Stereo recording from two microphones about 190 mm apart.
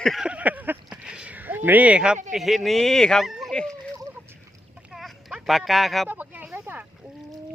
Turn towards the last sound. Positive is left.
turn(degrees=-10)  # may be behind; listen again after turning